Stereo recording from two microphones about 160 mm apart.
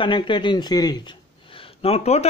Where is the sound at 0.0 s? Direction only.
30° left (ahead or behind).